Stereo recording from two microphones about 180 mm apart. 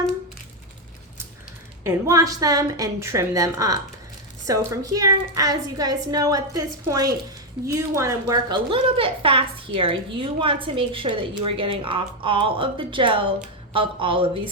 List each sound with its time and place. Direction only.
1.8 s a woman's voice: 15° right (ahead or behind)